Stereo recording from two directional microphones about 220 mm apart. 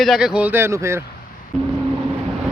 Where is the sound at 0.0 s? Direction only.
Centre (ahead or behind).